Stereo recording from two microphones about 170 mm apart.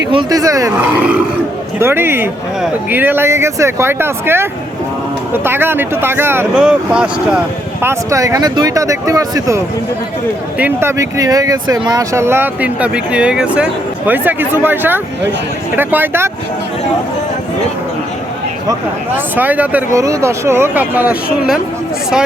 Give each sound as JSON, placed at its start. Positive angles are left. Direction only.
{"t": 0.1, "sound": "speech", "side_deg": -25}
{"t": 10.6, "sound": "speech", "side_deg": -15}
{"t": 19.4, "sound": "speech", "side_deg": -10}